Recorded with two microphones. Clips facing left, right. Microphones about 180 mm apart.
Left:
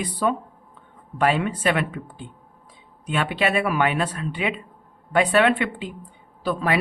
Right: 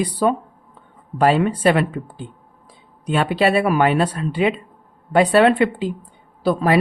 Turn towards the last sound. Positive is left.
turn(degrees=-40)  # may be behind; listen again after turning